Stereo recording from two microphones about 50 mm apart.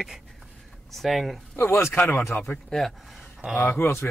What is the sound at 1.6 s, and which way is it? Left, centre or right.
Speech, left.